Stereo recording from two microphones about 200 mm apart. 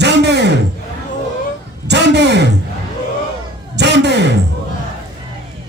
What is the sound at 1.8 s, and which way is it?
Speech, 60° right (ahead or behind).